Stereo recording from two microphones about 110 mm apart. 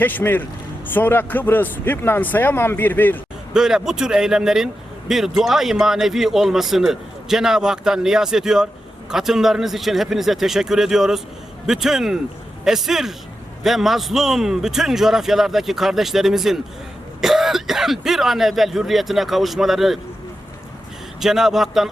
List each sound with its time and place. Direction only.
0.0 s speech: 15° left (ahead or behind)
3.5 s a man's voice: 5° right (ahead or behind)
21.2 s a man's voice: 5° right (ahead or behind)